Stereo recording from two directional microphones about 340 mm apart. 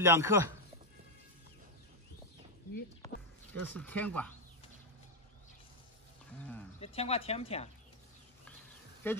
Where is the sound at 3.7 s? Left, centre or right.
Centre.